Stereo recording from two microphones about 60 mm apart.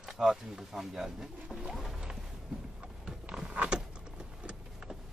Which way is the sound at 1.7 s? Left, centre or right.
Centre.